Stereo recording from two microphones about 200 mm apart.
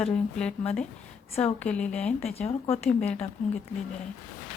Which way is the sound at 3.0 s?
5° left (ahead or behind).